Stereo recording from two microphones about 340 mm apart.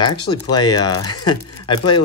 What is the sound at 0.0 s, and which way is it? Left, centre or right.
Speech, centre.